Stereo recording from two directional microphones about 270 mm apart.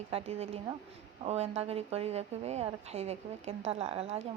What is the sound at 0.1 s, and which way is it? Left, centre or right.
A woman's voice, right.